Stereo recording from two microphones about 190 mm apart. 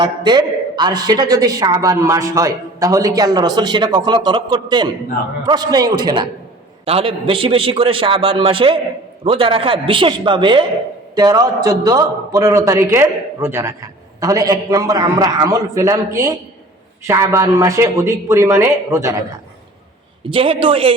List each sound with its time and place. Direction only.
0.0 s a woman's voice: 25° right (ahead or behind)
20.3 s a woman's voice: 30° right (ahead or behind)